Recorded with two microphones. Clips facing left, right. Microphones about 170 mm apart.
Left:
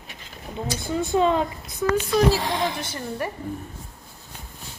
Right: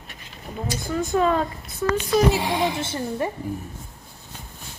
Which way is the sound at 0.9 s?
25° left (ahead or behind).